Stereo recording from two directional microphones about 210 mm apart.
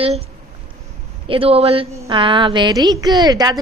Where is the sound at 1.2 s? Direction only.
25° right (ahead or behind).